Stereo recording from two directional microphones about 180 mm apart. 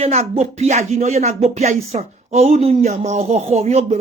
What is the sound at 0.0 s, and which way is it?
Speech, 35° right (ahead or behind).